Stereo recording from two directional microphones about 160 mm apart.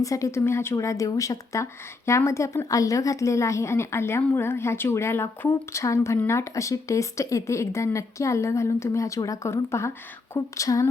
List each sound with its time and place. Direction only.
0.0 s a woman's voice: 20° left (ahead or behind)